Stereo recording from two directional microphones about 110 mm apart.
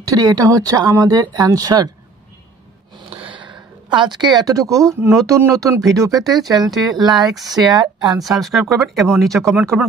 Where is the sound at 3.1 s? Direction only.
60° right (ahead or behind).